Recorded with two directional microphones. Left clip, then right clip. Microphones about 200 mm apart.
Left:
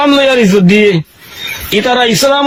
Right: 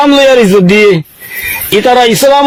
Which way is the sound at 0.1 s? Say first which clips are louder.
Right 4 dB; 40° right (ahead or behind).